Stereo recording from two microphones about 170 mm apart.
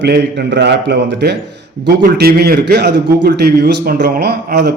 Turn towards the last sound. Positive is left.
turn(degrees=-80)